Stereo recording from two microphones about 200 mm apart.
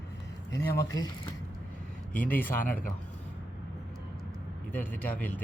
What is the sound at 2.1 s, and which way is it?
Speech, 45° left (ahead or behind).